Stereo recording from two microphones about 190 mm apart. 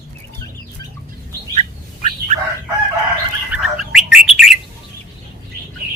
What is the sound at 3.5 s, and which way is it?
Bird, centre (ahead or behind).